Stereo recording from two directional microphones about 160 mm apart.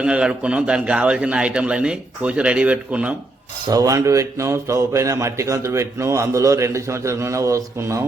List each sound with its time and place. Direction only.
0.0 s a man's voice: 5° right (ahead or behind)
3.7 s a man's voice: 20° right (ahead or behind)